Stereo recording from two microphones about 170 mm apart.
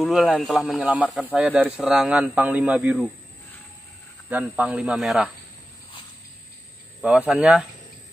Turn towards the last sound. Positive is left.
turn(degrees=-5)  # may be behind; listen again after turning